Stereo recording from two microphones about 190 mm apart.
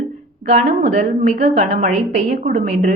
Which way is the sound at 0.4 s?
35° right (ahead or behind).